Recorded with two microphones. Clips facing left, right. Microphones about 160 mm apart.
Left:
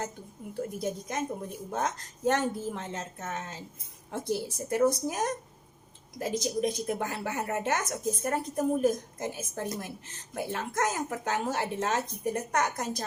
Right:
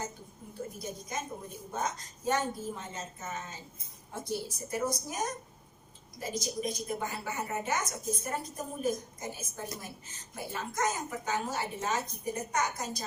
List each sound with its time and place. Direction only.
0.8 s a woman's voice: 65° left (ahead or behind)